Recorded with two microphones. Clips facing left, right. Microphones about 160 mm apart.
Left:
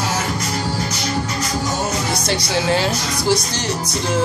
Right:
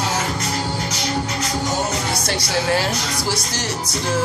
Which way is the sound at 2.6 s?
20° left (ahead or behind).